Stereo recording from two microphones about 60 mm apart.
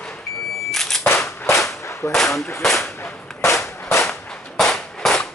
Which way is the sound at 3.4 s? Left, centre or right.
Left.